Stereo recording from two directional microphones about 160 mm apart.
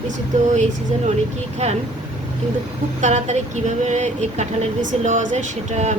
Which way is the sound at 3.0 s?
45° right (ahead or behind).